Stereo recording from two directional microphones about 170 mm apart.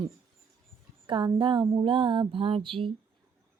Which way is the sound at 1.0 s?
25° right (ahead or behind).